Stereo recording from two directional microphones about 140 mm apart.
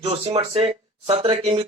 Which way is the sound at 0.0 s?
45° right (ahead or behind).